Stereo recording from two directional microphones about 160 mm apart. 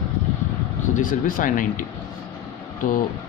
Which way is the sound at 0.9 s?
55° left (ahead or behind).